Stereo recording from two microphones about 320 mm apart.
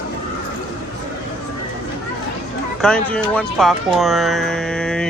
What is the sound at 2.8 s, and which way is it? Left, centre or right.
Speech, centre.